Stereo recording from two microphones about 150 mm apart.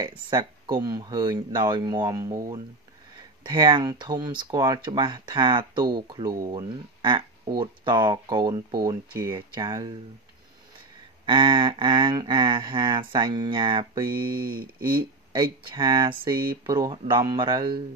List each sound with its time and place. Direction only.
0.2 s speech: 30° right (ahead or behind)
11.2 s speech: 35° right (ahead or behind)
14.4 s speech: 75° right (ahead or behind)
15.3 s speech: 30° right (ahead or behind)